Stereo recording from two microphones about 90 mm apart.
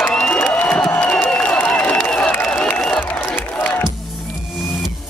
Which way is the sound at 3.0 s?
15° left (ahead or behind).